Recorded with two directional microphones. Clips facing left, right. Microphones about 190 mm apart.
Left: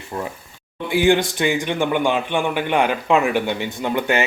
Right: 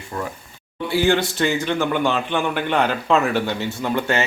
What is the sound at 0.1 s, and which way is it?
Speech, 25° left (ahead or behind).